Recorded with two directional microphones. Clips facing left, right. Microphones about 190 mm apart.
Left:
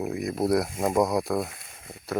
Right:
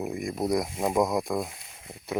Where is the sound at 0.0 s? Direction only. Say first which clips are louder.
Left 3 dB; centre (ahead or behind).